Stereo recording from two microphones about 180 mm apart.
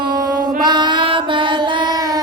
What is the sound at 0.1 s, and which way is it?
Music, 20° right (ahead or behind).